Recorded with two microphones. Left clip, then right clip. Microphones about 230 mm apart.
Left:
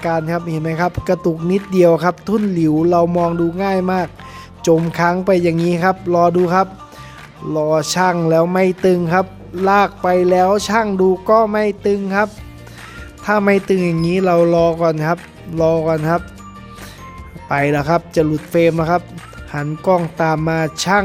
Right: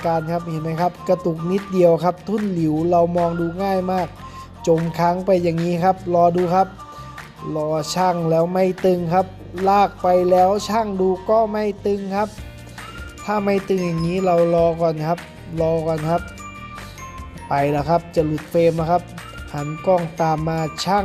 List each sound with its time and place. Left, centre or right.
0.0 s speech: centre
17.5 s speech: left